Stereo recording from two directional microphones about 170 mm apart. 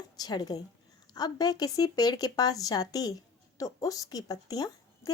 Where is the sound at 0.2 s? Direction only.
25° left (ahead or behind).